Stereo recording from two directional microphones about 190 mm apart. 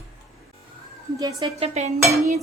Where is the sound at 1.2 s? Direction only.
20° right (ahead or behind).